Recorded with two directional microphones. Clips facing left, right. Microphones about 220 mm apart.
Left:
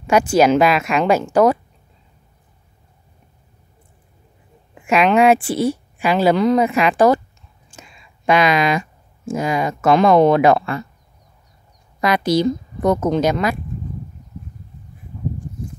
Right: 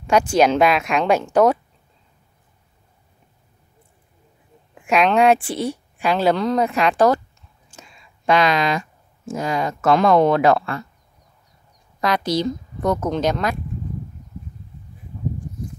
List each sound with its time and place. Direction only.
0.0 s a woman's voice: 5° left (ahead or behind)
4.7 s a woman's voice: 5° left (ahead or behind)
8.3 s speech: 10° left (ahead or behind)
12.0 s speech: 10° left (ahead or behind)